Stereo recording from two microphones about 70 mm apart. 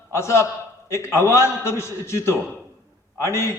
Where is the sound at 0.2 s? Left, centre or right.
Left.